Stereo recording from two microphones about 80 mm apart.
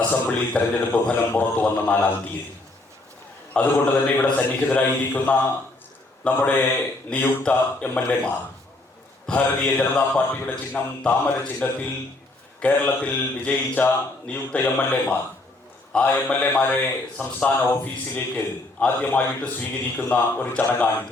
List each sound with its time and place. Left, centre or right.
0.1 s speech: centre
3.5 s a man's voice: centre